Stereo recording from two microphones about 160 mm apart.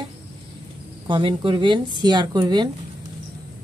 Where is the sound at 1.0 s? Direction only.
30° right (ahead or behind).